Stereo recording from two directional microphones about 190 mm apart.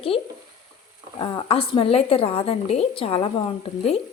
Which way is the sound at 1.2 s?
30° left (ahead or behind).